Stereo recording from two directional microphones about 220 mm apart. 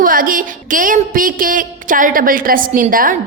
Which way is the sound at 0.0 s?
40° right (ahead or behind).